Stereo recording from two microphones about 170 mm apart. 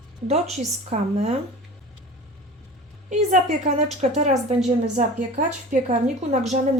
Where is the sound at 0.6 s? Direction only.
40° right (ahead or behind).